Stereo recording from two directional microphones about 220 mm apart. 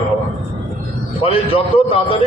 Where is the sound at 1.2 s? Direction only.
25° left (ahead or behind).